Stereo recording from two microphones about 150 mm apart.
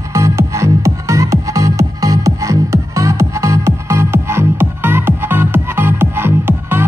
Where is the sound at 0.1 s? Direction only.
20° right (ahead or behind).